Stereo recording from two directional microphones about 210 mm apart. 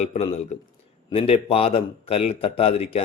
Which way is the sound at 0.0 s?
30° left (ahead or behind).